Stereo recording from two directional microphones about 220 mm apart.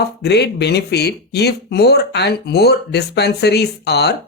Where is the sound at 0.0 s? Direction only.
50° left (ahead or behind).